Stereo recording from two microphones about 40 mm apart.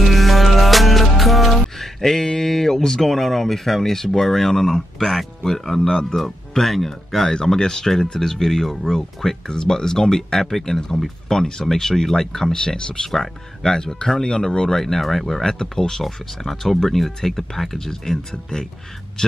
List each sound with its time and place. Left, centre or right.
0.0 s music: centre
6.1 s speech: centre
7.3 s speech: centre
14.8 s speech: centre
16.0 s speech: centre